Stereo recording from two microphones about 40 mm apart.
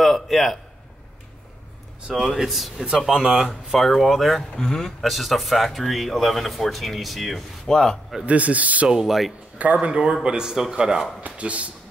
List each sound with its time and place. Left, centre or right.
0.0 s a sound: centre
2.0 s speech: centre
3.1 s speech: centre
3.7 s speech: centre
4.6 s speech: centre
5.0 s speech: centre
7.7 s speech: centre
8.3 s speech: right
8.8 s speech: centre
9.6 s speech: right; by 11.1 s centre
11.2 s speech: right